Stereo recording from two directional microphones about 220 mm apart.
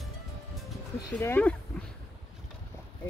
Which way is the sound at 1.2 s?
10° left (ahead or behind).